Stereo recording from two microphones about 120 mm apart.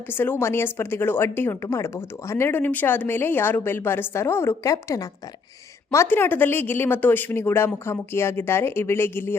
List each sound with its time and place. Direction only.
0.1 s speech: 20° left (ahead or behind)